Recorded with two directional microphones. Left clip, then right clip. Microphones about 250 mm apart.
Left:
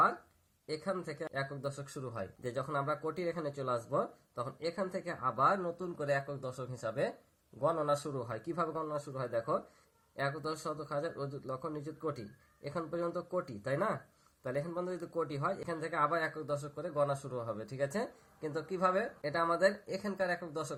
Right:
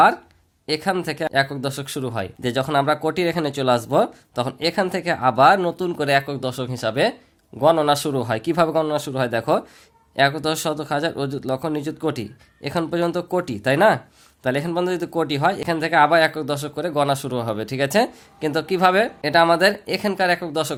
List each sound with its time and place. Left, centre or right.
0.7 s speech: right